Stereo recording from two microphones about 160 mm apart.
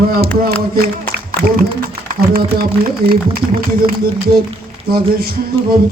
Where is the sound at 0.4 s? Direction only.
70° right (ahead or behind).